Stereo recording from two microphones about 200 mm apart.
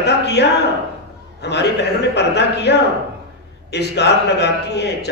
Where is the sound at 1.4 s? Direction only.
60° left (ahead or behind).